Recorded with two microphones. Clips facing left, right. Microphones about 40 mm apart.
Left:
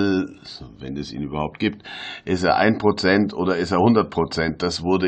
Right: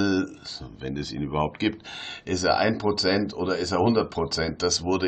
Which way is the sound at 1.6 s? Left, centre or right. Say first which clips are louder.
Left 3 dB; left.